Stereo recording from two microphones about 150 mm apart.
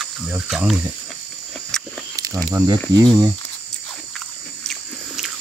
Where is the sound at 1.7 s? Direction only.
5° left (ahead or behind).